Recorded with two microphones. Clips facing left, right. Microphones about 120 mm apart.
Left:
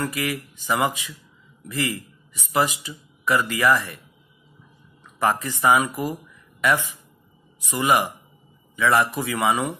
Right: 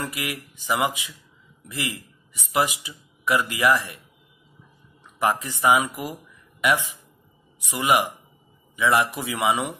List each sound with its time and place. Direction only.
0.0 s speech: 15° right (ahead or behind)
5.2 s speech: 15° right (ahead or behind)